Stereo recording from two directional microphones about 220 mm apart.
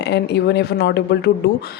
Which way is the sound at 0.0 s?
50° left (ahead or behind).